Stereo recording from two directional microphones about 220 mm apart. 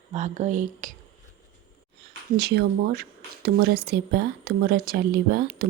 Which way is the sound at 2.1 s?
50° right (ahead or behind).